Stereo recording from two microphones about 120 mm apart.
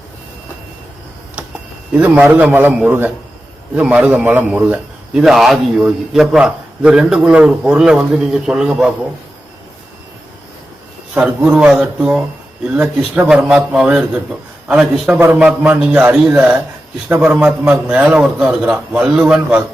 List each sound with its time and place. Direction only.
1.9 s a man's voice: 15° right (ahead or behind)
5.2 s a man's voice: centre (ahead or behind)
11.1 s a man's voice: 10° right (ahead or behind)
15.1 s a man's voice: 15° right (ahead or behind)